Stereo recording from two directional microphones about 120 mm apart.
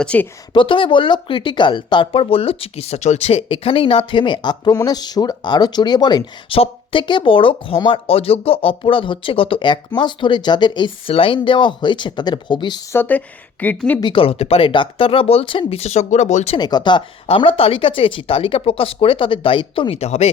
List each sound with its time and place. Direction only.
0.0 s a woman's voice: 10° left (ahead or behind)
0.5 s speech: 45° left (ahead or behind)
6.5 s speech: 50° left (ahead or behind)
12.9 s a woman's voice: 15° left (ahead or behind)
14.0 s speech: 45° left (ahead or behind)
15.8 s speech: 70° left (ahead or behind)
16.6 s speech: 35° left (ahead or behind)
17.2 s speech: 50° left (ahead or behind)